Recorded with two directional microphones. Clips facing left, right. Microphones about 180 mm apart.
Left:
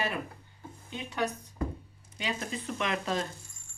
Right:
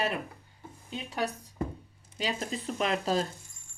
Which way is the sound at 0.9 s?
35° right (ahead or behind).